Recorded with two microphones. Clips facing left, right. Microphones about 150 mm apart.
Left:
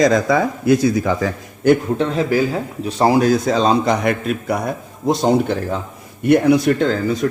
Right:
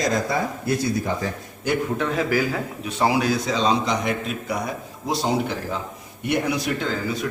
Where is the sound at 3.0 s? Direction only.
45° left (ahead or behind).